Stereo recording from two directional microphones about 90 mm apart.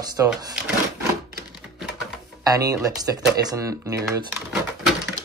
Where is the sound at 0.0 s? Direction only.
45° right (ahead or behind).